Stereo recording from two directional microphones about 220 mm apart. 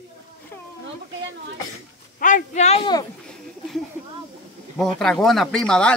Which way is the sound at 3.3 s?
Centre (ahead or behind).